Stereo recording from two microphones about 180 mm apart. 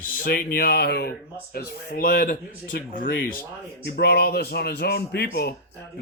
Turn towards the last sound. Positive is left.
turn(degrees=60)  # may be behind; listen again after turning